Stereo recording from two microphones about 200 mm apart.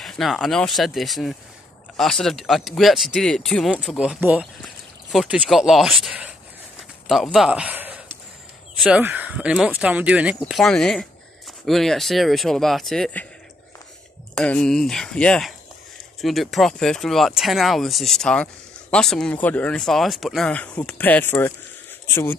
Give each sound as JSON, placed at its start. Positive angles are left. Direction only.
{"t": 0.0, "sound": "speech", "side_deg": 0}
{"t": 14.3, "sound": "speech", "side_deg": 5}